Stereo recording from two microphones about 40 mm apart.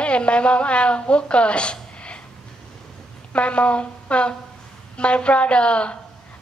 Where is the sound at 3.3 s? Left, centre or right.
Left.